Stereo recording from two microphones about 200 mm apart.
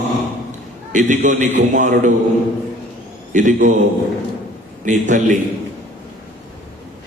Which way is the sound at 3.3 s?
40° right (ahead or behind).